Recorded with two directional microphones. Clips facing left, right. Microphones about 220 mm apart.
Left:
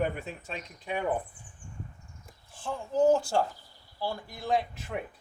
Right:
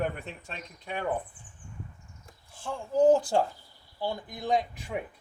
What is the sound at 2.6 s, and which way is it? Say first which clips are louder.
Speech: right 2 dB; 15° right (ahead or behind).